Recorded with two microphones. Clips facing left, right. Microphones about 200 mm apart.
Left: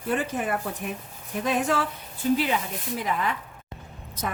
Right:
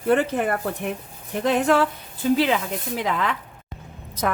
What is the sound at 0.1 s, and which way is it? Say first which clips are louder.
A woman's voice: right 6 dB; 60° right (ahead or behind).